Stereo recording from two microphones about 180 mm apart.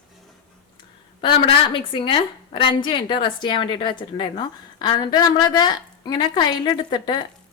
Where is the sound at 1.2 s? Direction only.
25° left (ahead or behind).